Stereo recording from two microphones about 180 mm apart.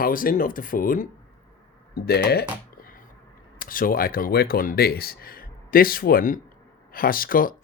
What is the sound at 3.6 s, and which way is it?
Speech, 50° left (ahead or behind).